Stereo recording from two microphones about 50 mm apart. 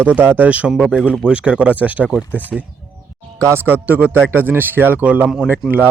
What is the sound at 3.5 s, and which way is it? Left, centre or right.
A man's voice, right.